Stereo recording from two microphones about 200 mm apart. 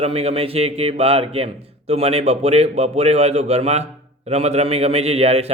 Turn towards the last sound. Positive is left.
turn(degrees=-30)  # may be behind; listen again after turning